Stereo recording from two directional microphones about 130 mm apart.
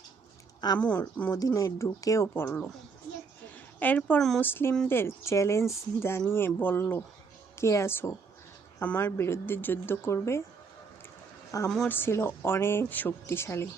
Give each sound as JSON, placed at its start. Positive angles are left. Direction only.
{"t": 0.8, "sound": "speech", "side_deg": 10}
{"t": 1.3, "sound": "speech", "side_deg": 25}
{"t": 3.8, "sound": "speech", "side_deg": 15}
{"t": 11.5, "sound": "speech", "side_deg": 25}